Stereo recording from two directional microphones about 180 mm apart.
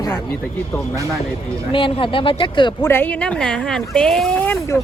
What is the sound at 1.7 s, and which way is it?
Speech, 30° left (ahead or behind).